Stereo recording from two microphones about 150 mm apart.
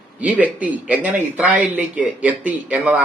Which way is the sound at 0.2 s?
10° right (ahead or behind).